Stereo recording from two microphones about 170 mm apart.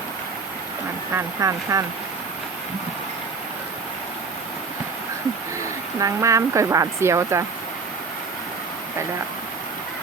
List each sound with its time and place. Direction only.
1.1 s speech: 20° right (ahead or behind)
6.0 s speech: 20° right (ahead or behind)